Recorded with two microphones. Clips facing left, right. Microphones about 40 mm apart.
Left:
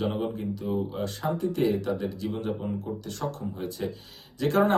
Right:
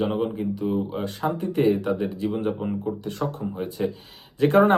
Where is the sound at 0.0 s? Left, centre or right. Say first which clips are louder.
Right 4 dB; centre.